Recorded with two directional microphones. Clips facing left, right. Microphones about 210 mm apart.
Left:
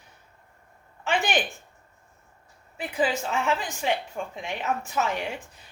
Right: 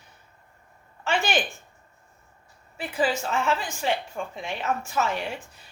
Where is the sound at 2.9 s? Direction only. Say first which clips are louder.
Right 1 dB; 20° left (ahead or behind).